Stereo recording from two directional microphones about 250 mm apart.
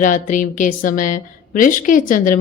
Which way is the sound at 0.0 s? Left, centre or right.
Left.